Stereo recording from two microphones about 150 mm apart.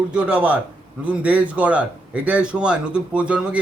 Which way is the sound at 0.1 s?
5° right (ahead or behind).